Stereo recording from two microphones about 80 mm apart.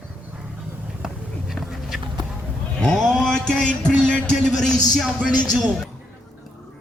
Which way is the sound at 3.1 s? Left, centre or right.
Centre.